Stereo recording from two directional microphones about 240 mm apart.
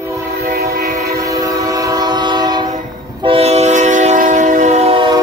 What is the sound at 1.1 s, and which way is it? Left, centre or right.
Train, centre.